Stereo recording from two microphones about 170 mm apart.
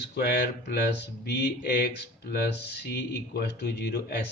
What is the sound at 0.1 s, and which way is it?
Speech, 70° left (ahead or behind).